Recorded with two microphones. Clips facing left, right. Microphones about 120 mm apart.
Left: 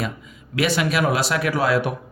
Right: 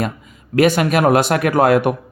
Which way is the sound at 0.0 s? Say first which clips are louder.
Right 5 dB; 50° right (ahead or behind).